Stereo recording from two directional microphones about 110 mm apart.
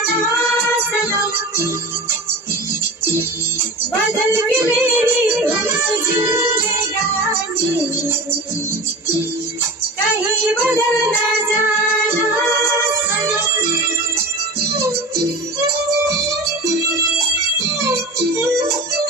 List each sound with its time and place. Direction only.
4.3 s music: 20° right (ahead or behind)
10.3 s music: 20° right (ahead or behind)
13.1 s music: 20° right (ahead or behind)
18.3 s music: 25° right (ahead or behind)